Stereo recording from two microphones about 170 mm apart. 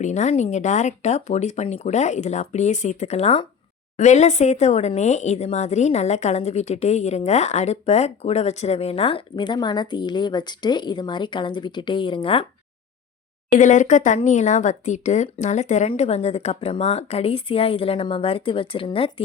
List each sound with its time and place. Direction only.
0.0 s speech: 45° left (ahead or behind)
13.6 s speech: 45° left (ahead or behind)